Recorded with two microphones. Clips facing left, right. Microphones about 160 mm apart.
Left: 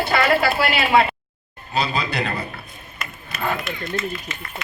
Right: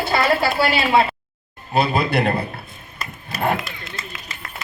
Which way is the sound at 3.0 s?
35° right (ahead or behind).